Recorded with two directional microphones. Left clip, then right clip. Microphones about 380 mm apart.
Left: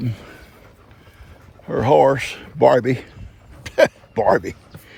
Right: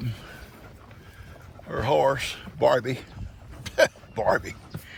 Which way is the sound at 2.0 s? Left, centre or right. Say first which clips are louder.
Left 8 dB; centre.